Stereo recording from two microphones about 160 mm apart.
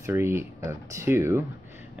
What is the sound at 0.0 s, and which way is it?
Speech, 15° right (ahead or behind).